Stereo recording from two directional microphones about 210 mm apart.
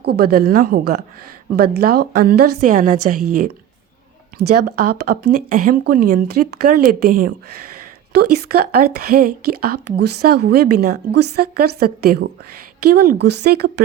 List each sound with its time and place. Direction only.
0.0 s speech: 50° right (ahead or behind)
4.4 s speech: 50° right (ahead or behind)